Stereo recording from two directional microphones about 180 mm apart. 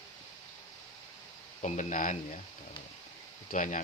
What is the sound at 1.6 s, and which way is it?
Speech, 45° left (ahead or behind).